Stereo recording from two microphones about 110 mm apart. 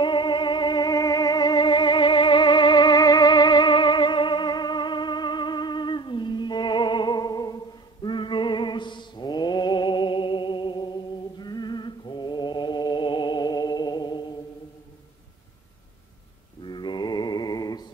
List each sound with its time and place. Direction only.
0.0 s music: 45° left (ahead or behind)
16.6 s mantra: 45° left (ahead or behind)